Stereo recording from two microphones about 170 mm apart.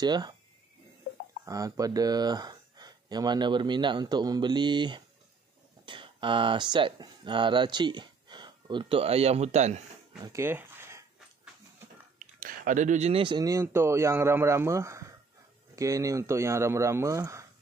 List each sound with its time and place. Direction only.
0.0 s speech: 25° right (ahead or behind)
1.4 s speech: 20° right (ahead or behind); by 9.8 s 40° right (ahead or behind)
10.2 s a sound: 15° right (ahead or behind)
12.2 s speech: 50° right (ahead or behind); by 17.5 s 15° right (ahead or behind)